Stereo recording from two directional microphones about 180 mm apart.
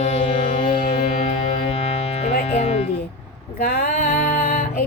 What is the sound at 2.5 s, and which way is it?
Music, 35° left (ahead or behind).